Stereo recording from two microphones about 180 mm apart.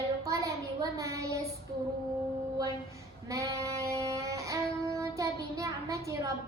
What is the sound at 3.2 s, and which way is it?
Music, 15° right (ahead or behind).